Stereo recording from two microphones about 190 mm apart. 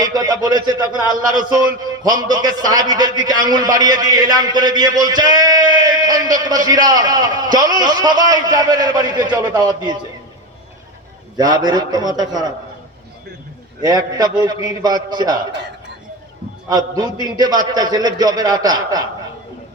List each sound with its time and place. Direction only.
0.0 s a man's voice: 20° right (ahead or behind)
11.3 s a man's voice: 20° right (ahead or behind)
13.8 s a man's voice: 20° right (ahead or behind)
16.6 s a man's voice: 20° right (ahead or behind)